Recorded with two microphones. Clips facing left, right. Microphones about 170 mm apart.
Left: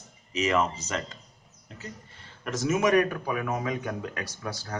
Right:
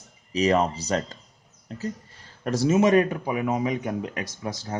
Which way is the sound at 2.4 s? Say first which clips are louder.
Right 5 dB; 35° right (ahead or behind).